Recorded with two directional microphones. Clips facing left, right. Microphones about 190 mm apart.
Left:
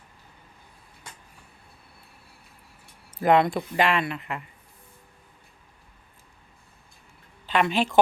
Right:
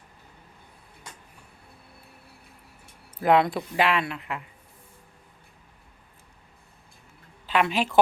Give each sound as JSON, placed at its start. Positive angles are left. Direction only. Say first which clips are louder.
{"t": 3.2, "sound": "speech", "louder": "left 1 dB", "side_deg": 0}
{"t": 7.4, "sound": "speech", "louder": "left 1 dB", "side_deg": -5}